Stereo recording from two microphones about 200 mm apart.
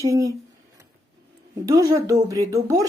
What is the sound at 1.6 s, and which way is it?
Speech, 15° right (ahead or behind).